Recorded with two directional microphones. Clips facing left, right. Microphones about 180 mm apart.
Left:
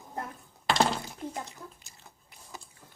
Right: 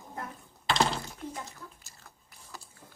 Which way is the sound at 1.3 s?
20° left (ahead or behind).